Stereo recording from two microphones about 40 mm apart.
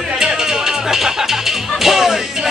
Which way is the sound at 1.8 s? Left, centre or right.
Centre.